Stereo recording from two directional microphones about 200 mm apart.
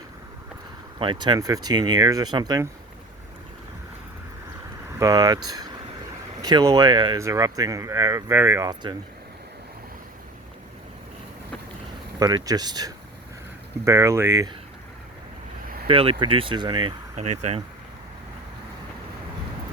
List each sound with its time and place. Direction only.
0.9 s speech: 25° right (ahead or behind)
4.9 s speech: 15° right (ahead or behind)
12.2 s speech: 20° right (ahead or behind)
15.9 s speech: 25° right (ahead or behind)
17.2 s speech: 35° right (ahead or behind)